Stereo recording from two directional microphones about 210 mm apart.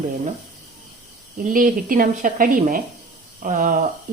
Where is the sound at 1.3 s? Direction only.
40° right (ahead or behind).